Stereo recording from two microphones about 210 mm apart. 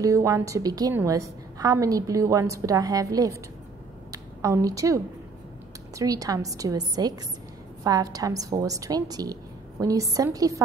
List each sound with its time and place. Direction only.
0.0 s a woman's voice: 15° right (ahead or behind)
4.1 s a sound: 15° right (ahead or behind)
5.9 s a woman's voice: 15° right (ahead or behind)